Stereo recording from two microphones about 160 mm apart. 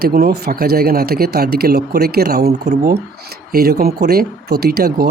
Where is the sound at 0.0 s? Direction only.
70° right (ahead or behind).